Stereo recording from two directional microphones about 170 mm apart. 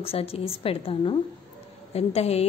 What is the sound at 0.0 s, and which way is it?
A woman's voice, 35° left (ahead or behind).